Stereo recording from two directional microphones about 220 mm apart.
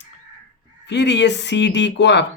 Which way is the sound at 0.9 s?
50° left (ahead or behind).